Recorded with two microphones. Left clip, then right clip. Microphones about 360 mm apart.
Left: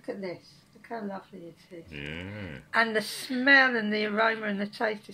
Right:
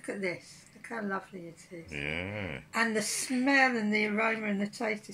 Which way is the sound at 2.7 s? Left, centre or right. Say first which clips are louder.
Left 4 dB; left.